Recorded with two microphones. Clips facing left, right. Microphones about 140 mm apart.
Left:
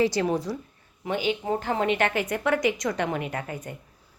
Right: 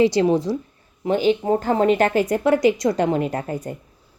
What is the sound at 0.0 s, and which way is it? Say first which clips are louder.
Speech: right 7 dB; 25° right (ahead or behind).